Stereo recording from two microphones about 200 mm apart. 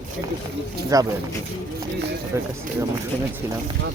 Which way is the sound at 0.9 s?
15° right (ahead or behind).